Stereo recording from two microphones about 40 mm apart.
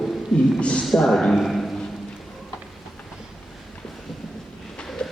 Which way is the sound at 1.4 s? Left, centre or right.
Centre.